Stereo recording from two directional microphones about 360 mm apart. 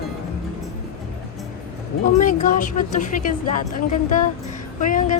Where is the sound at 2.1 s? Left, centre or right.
Centre.